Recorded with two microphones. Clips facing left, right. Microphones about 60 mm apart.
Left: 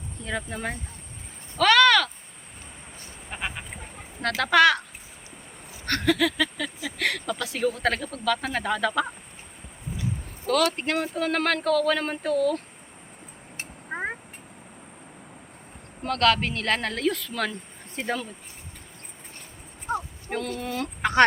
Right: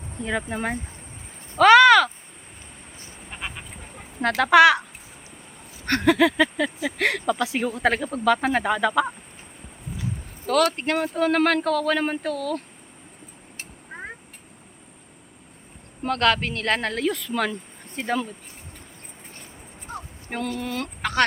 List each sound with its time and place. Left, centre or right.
0.3 s speech: right
1.5 s a sound: centre
3.2 s sheep: centre
4.2 s speech: centre; by 8.5 s right
8.5 s speech: centre
8.9 s speech: centre
10.4 s speech: centre
12.3 s speech: centre
13.6 s vehicle: left
16.0 s speech: centre
20.3 s speech: centre
21.0 s a sound: left